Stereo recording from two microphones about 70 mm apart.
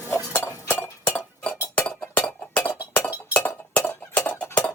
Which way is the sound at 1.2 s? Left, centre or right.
Left.